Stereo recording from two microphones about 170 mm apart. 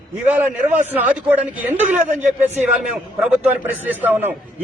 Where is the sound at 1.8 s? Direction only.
40° right (ahead or behind).